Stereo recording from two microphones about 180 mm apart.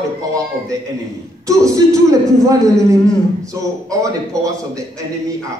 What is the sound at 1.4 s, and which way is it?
A man's voice, 20° right (ahead or behind).